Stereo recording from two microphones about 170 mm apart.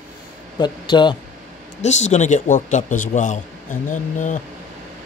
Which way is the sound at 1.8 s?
45° left (ahead or behind).